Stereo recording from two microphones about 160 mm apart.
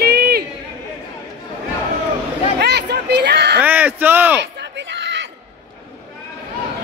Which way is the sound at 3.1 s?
90° right.